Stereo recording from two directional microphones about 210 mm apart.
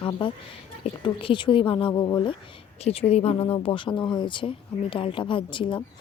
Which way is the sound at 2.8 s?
30° left (ahead or behind).